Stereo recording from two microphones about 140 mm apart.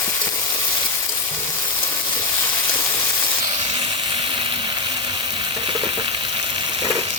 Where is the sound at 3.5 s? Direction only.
35° right (ahead or behind).